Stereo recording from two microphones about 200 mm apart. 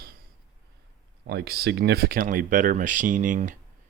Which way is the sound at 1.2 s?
55° right (ahead or behind).